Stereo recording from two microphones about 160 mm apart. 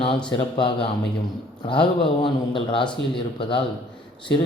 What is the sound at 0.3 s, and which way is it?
Speech, 30° left (ahead or behind).